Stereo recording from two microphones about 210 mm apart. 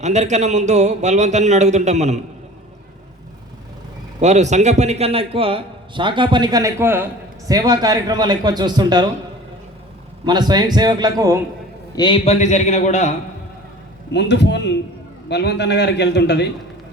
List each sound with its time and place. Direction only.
0.0 s a man's voice: 35° right (ahead or behind)
4.2 s a man's voice: 35° right (ahead or behind)
10.2 s a man's voice: 20° right (ahead or behind)
11.9 s a man's voice: 25° left (ahead or behind)
14.1 s a man's voice: 55° left (ahead or behind)